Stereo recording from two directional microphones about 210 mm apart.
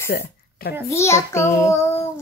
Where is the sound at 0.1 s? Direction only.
50° left (ahead or behind).